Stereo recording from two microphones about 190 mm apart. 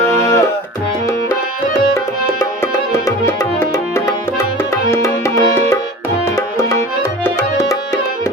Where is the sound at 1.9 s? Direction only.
15° left (ahead or behind).